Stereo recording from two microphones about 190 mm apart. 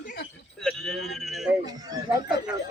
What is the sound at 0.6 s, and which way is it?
Speech, 5° left (ahead or behind).